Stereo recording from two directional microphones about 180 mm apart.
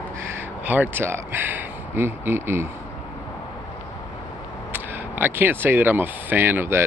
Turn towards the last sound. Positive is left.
turn(degrees=-10)  # may be behind; listen again after turning